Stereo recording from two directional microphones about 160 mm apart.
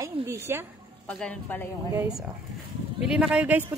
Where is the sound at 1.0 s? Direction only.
10° left (ahead or behind).